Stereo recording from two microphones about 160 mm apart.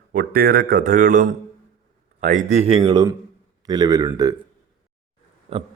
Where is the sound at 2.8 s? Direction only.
25° right (ahead or behind).